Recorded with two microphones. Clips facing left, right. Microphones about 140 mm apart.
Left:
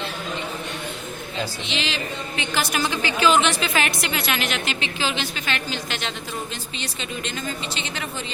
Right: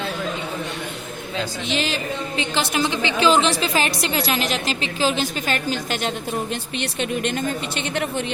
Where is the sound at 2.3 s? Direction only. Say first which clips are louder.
Right 2 dB; 30° right (ahead or behind).